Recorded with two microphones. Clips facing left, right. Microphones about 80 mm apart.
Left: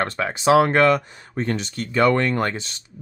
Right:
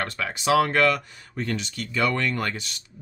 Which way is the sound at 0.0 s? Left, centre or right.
Left.